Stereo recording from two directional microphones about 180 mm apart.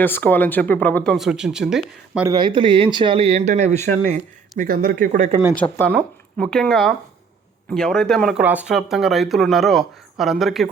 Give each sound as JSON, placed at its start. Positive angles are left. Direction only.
{"t": 0.0, "sound": "speech", "side_deg": 10}
{"t": 2.2, "sound": "speech", "side_deg": -25}
{"t": 5.5, "sound": "speech", "side_deg": 10}